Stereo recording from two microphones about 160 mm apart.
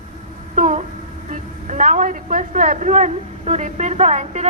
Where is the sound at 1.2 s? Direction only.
50° right (ahead or behind).